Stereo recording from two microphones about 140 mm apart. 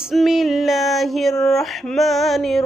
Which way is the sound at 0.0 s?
Centre (ahead or behind).